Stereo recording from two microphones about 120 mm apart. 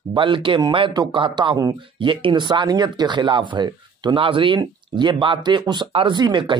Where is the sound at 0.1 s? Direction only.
45° right (ahead or behind).